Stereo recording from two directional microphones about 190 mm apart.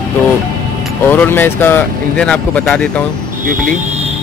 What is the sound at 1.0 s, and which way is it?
Speech, 10° left (ahead or behind).